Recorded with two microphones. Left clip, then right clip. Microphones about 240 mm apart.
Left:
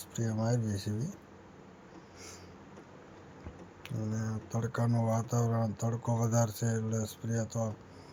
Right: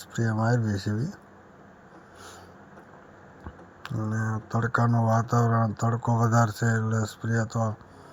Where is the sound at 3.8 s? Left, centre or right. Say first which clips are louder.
Right 8 dB; centre.